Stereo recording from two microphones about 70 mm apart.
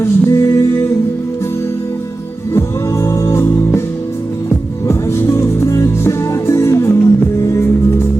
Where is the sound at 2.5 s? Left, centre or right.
Left.